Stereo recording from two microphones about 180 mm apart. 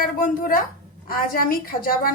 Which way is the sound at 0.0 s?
50° left (ahead or behind).